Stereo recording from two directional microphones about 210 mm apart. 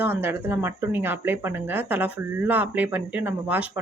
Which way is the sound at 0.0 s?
10° right (ahead or behind).